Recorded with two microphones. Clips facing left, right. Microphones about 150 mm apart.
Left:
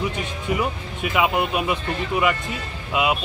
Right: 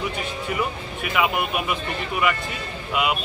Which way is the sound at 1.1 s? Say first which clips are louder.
Left 2 dB; 25° left (ahead or behind).